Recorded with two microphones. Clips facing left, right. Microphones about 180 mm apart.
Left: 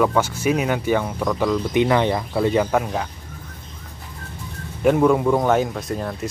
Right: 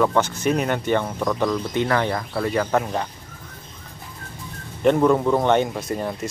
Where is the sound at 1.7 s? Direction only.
20° left (ahead or behind).